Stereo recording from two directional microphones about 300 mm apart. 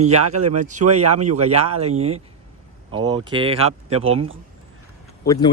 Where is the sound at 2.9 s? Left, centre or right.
Centre.